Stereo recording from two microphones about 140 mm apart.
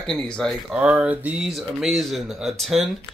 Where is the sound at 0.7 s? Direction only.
10° right (ahead or behind).